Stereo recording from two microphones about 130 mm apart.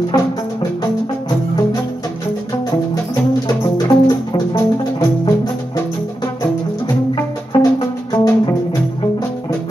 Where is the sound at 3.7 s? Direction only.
30° left (ahead or behind).